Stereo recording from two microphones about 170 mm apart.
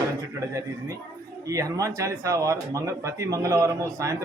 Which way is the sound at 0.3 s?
20° right (ahead or behind).